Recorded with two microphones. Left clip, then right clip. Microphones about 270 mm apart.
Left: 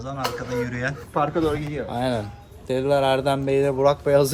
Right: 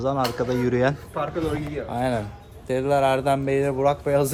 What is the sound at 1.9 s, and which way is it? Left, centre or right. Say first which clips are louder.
Speech: right 1 dB; centre.